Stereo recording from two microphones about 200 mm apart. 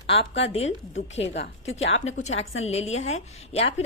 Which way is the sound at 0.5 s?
35° left (ahead or behind).